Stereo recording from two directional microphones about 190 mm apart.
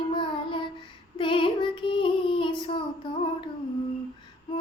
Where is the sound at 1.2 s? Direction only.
25° left (ahead or behind).